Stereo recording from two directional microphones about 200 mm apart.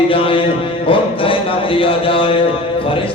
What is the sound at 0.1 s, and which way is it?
Music, 25° left (ahead or behind).